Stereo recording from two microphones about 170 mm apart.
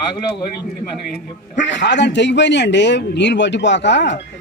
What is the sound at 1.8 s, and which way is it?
A man's voice, 90° left.